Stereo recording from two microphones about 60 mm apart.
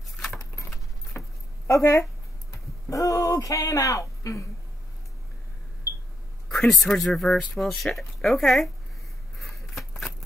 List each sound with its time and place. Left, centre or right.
0.1 s keys jangling: centre
1.1 s keys jangling: left
1.7 s speech: left
6.5 s speech: centre
9.4 s a sound: centre